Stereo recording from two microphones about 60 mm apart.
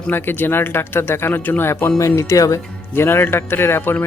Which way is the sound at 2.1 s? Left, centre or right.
Left.